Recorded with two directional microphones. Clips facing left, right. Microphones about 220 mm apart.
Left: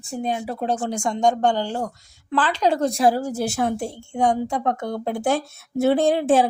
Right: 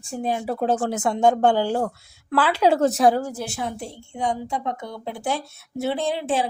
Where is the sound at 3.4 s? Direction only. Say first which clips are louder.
Left 6 dB; 40° left (ahead or behind).